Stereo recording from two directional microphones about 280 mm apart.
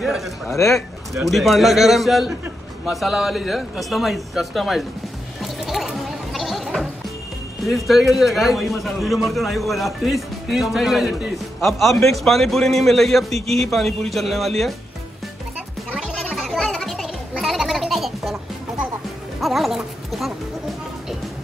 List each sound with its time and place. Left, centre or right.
0.0 s a man's voice: centre
0.6 s speech: centre
1.1 s a man's voice: centre
5.4 s chatter: centre
7.6 s a man's voice: centre
13.3 s a man's voice: right
13.7 s a man's voice: centre
15.9 s music: centre
19.4 s a sound: centre